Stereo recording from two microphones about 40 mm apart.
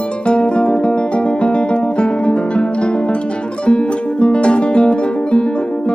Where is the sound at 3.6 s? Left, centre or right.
Left.